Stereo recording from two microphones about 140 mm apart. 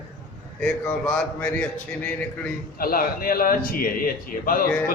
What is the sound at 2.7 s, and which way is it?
A man's voice, 90° left.